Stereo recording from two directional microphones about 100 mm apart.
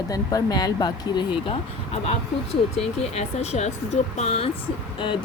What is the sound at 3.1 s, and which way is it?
Speech, 90° left.